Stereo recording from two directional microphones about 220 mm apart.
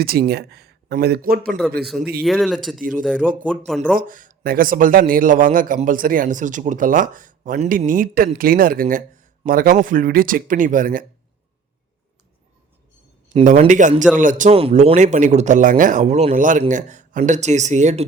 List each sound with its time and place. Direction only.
0.0 s speech: 45° right (ahead or behind)
2.2 s speech: centre (ahead or behind)
3.9 s a man's voice: 40° right (ahead or behind)
13.3 s a man's voice: 30° right (ahead or behind)